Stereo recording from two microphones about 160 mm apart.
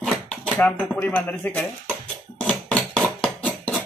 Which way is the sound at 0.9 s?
10° left (ahead or behind).